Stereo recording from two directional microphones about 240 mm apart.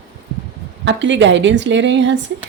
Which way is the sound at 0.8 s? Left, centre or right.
Right.